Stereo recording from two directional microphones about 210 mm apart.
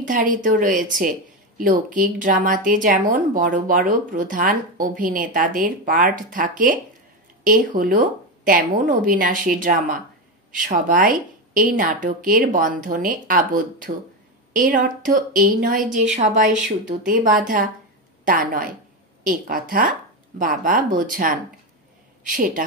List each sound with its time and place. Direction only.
0.0 s a woman's voice: 40° right (ahead or behind)